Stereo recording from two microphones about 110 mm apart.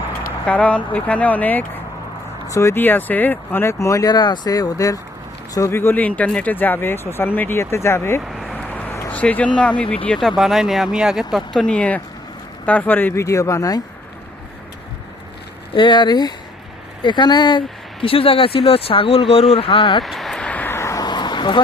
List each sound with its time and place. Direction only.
0.4 s speech: 10° left (ahead or behind)
2.5 s speech: 25° left (ahead or behind)
8.2 s vehicle: centre (ahead or behind)
8.5 s a sound: 15° left (ahead or behind)
9.6 s speech: 10° left (ahead or behind)
10.1 s speech: centre (ahead or behind); by 13.2 s 15° left (ahead or behind)
13.2 s speech: 30° left (ahead or behind)
15.7 s speech: 45° left (ahead or behind)
18.0 s speech: 55° left (ahead or behind)
20.0 s vehicle: centre (ahead or behind); by 21.0 s 25° left (ahead or behind)
21.0 s a sound: 40° left (ahead or behind)